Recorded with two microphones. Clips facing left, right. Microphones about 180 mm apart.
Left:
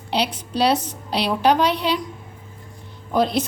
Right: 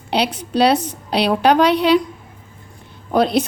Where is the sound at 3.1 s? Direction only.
65° right (ahead or behind).